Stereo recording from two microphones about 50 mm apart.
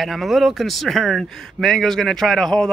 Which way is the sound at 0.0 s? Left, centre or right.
Centre.